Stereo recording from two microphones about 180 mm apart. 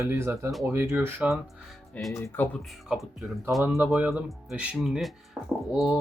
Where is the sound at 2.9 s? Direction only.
Centre (ahead or behind).